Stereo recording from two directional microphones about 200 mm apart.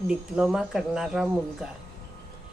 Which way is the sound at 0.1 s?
5° right (ahead or behind).